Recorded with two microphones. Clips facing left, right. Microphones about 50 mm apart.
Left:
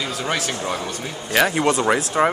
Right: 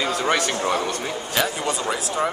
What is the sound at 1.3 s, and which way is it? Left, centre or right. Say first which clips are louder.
Speech: left 7 dB; left.